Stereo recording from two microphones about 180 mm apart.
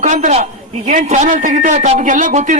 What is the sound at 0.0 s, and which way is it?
A man's voice, 40° right (ahead or behind).